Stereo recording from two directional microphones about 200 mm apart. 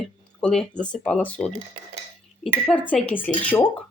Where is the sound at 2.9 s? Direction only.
5° left (ahead or behind).